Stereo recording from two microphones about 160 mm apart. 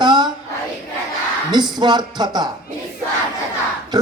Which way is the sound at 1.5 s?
25° right (ahead or behind).